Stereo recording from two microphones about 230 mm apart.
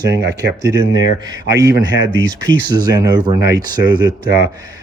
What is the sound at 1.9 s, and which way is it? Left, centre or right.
Speech, right.